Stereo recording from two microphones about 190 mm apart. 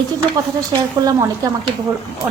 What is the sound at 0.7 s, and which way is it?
Speech, 15° right (ahead or behind).